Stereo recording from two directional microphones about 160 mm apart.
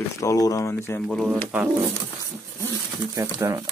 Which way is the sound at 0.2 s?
20° left (ahead or behind).